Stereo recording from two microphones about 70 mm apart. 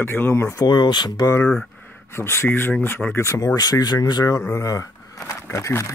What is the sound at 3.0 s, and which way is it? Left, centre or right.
Speech, centre.